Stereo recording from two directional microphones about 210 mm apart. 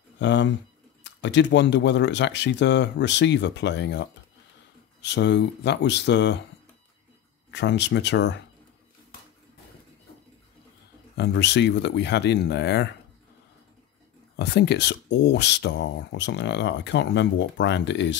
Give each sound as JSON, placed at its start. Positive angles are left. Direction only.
{"t": 0.2, "sound": "speech", "side_deg": 60}
{"t": 7.5, "sound": "speech", "side_deg": 55}
{"t": 11.1, "sound": "speech", "side_deg": 55}
{"t": 14.3, "sound": "speech", "side_deg": 50}